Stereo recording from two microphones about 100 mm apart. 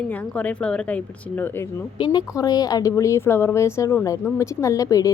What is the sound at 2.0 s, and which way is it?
A woman's voice, 45° left (ahead or behind).